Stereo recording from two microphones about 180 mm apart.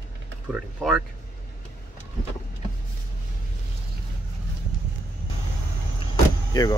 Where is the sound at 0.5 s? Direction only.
5° right (ahead or behind).